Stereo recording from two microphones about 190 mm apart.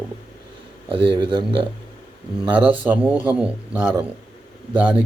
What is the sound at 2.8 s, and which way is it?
A man's voice, 10° right (ahead or behind).